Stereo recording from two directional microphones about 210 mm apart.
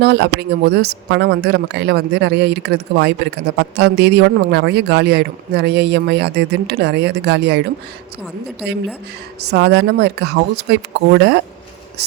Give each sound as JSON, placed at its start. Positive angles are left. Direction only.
{"t": 0.0, "sound": "speech", "side_deg": -50}
{"t": 9.5, "sound": "speech", "side_deg": -55}